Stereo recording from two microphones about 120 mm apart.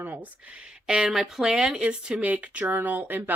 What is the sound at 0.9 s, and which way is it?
Speech, 5° right (ahead or behind).